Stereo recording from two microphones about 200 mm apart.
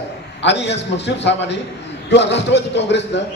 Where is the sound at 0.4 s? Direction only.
60° left (ahead or behind).